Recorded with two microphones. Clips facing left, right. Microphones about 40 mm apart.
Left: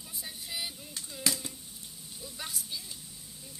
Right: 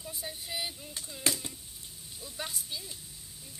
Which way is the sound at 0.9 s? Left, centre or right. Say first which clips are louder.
Even; right.